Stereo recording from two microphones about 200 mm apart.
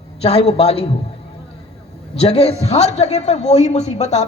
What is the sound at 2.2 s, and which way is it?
A man's voice, 30° left (ahead or behind).